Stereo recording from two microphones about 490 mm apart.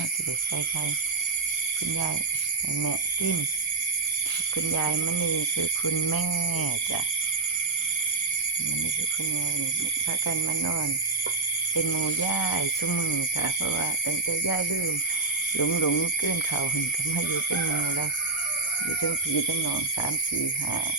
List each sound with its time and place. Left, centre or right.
4.5 s speech: left
11.7 s speech: left
15.5 s speech: left